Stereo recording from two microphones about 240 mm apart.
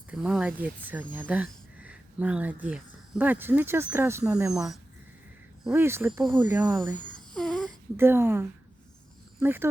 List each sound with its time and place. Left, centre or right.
0.1 s speech: centre
6.3 s speech: centre
7.3 s a sound: centre
7.9 s speech: centre